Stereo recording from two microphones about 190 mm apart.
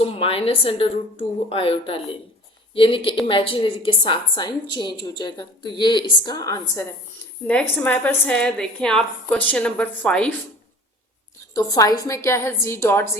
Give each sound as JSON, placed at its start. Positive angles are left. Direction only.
{"t": 0.0, "sound": "speech", "side_deg": 30}
{"t": 7.4, "sound": "a woman's voice", "side_deg": 5}
{"t": 11.5, "sound": "a woman's voice", "side_deg": 20}